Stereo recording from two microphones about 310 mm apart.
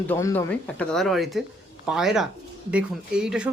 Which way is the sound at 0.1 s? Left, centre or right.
Centre.